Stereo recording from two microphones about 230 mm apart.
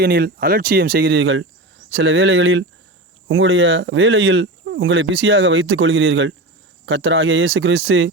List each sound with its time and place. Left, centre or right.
0.0 s speech: right